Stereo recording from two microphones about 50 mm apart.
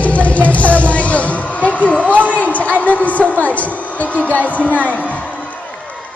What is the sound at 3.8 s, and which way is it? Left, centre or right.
Music, left.